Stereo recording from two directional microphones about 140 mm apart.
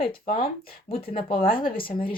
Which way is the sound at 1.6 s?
90° left.